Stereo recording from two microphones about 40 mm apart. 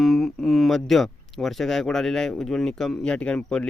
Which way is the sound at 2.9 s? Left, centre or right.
Left.